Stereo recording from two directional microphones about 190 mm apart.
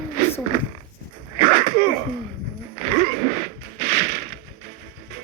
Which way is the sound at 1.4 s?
45° right (ahead or behind).